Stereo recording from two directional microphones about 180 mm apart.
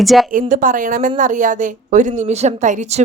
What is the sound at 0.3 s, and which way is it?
A woman's voice, 45° right (ahead or behind).